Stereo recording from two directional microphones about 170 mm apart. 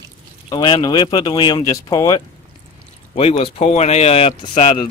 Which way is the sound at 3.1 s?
35° left (ahead or behind).